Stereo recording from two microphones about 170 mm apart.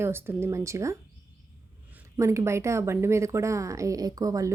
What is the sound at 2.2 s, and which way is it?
A woman's voice, 15° right (ahead or behind).